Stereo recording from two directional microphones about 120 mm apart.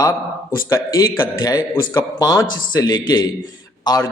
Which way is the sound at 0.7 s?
30° left (ahead or behind).